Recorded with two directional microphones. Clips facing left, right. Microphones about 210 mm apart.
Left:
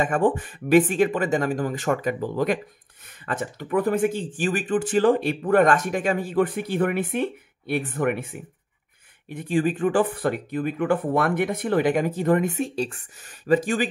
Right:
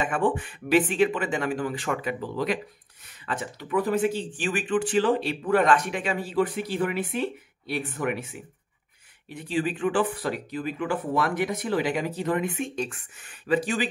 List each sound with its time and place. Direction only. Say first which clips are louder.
0.0 s speech: left 4 dB; 45° left (ahead or behind)